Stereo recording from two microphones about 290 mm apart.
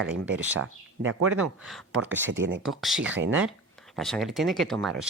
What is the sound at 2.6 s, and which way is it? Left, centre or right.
Speech, centre.